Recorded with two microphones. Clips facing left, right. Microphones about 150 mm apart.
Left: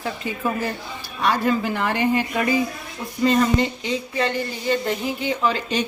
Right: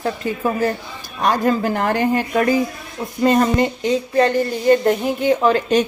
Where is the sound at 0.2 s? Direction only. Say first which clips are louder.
Right 5 dB; 45° right (ahead or behind).